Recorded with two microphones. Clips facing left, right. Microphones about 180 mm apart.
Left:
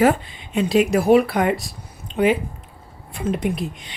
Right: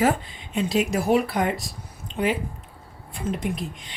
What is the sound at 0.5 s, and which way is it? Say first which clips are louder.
Speech: left 6 dB; 65° left (ahead or behind).